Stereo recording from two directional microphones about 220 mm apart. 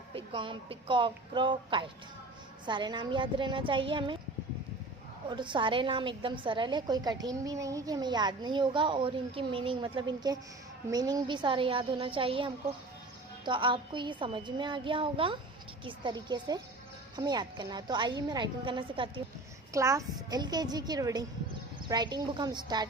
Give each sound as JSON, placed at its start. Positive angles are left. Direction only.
{"t": 0.1, "sound": "a woman's voice", "side_deg": -25}
{"t": 5.3, "sound": "a woman's voice", "side_deg": -20}